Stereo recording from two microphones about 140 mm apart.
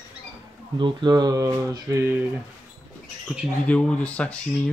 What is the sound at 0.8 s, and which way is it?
Speech, 30° right (ahead or behind).